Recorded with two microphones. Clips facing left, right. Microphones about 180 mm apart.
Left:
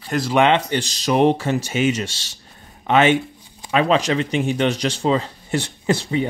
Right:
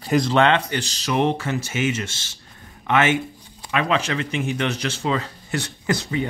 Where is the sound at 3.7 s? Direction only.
30° left (ahead or behind).